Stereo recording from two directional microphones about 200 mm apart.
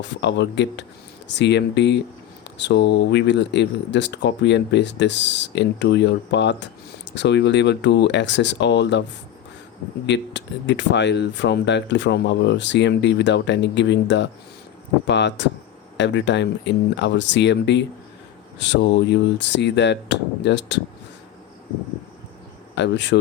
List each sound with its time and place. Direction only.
0.2 s speech: 60° left (ahead or behind)
10.1 s speech: 60° left (ahead or behind)
22.7 s speech: 60° left (ahead or behind)